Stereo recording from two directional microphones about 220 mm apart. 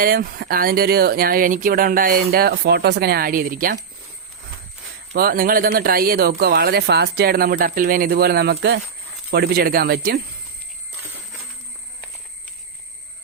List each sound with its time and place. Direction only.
0.0 s speech: 40° right (ahead or behind)
5.1 s speech: 40° right (ahead or behind)